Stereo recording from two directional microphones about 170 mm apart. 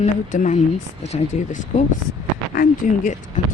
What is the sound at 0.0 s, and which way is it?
Speech, 45° left (ahead or behind).